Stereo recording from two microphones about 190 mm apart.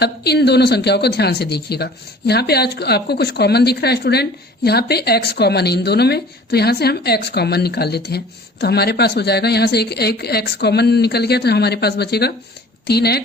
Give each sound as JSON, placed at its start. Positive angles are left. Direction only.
{"t": 0.0, "sound": "speech", "side_deg": 60}